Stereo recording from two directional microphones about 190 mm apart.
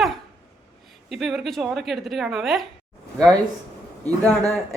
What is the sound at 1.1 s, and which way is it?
A woman's voice, centre (ahead or behind).